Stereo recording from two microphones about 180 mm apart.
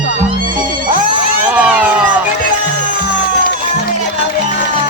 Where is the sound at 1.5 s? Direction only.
5° right (ahead or behind).